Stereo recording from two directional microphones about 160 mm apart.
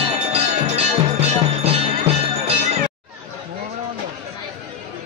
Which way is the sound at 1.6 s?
40° right (ahead or behind).